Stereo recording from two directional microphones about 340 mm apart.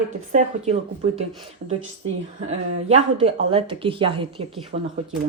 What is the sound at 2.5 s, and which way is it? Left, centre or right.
A woman's voice, centre.